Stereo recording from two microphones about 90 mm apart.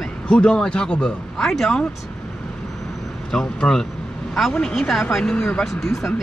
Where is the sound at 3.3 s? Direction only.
5° left (ahead or behind).